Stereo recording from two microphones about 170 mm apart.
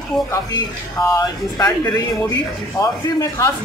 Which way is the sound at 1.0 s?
20° left (ahead or behind).